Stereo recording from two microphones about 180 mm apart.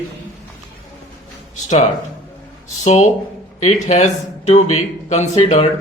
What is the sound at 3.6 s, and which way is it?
A man's voice, 40° left (ahead or behind).